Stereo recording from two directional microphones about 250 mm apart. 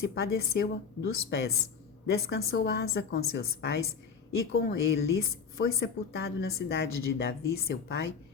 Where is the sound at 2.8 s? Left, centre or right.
Left.